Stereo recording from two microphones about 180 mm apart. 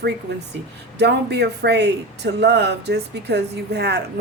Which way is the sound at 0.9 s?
70° right (ahead or behind).